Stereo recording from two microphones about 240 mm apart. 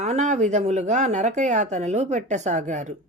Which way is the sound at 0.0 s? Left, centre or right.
Right.